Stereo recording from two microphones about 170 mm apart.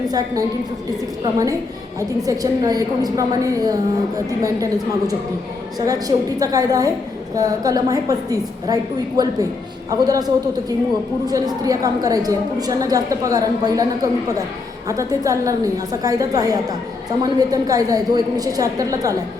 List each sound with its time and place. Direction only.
1.2 s a woman's voice: 20° right (ahead or behind)